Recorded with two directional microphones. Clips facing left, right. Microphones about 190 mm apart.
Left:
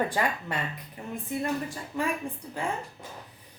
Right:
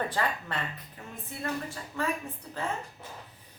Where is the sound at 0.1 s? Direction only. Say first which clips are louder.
Left 2 dB; 15° left (ahead or behind).